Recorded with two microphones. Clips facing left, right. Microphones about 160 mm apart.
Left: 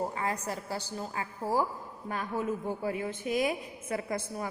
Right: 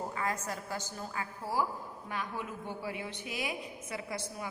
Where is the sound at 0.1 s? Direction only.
30° left (ahead or behind).